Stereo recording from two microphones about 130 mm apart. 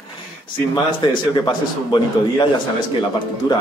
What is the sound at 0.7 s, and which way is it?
Speech, 40° left (ahead or behind).